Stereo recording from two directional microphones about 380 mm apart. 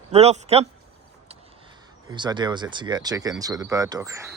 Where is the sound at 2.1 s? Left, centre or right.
Centre.